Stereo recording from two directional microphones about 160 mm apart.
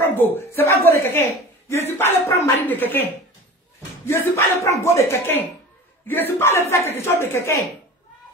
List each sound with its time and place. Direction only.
0.1 s a woman's voice: 10° left (ahead or behind)